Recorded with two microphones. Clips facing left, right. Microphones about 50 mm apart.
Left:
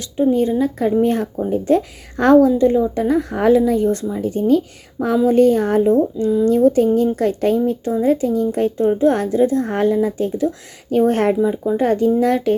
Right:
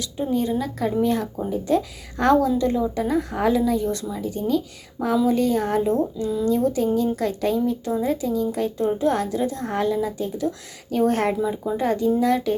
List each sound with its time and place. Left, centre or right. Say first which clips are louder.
0.0 s a woman's voice: left 7 dB; left